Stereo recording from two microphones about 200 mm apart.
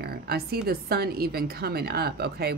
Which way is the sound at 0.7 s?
50° right (ahead or behind).